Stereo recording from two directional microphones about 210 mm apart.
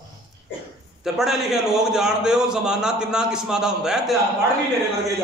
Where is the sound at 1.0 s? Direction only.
Centre (ahead or behind).